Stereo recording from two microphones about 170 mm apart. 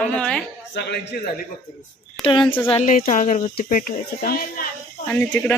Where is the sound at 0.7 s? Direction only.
85° left.